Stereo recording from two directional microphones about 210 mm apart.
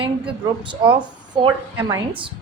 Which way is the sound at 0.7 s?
25° right (ahead or behind).